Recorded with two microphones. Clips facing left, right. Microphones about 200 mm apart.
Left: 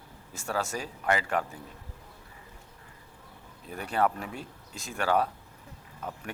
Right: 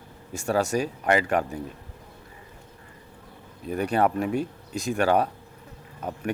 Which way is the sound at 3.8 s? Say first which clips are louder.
Right 5 dB; 15° right (ahead or behind).